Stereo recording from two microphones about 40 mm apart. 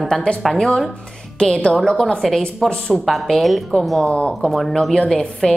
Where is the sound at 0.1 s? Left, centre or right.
Centre.